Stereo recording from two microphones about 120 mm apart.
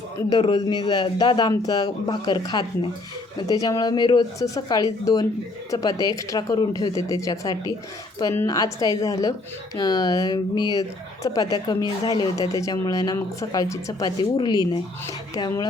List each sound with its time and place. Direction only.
0.3 s a woman's voice: 35° left (ahead or behind)